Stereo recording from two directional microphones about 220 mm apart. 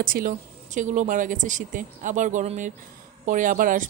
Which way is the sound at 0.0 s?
40° right (ahead or behind).